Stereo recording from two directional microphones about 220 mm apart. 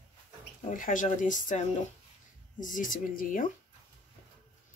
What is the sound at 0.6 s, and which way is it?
Speech, 35° left (ahead or behind).